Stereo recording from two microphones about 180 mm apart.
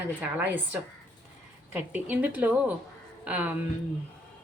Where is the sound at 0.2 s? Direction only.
10° right (ahead or behind).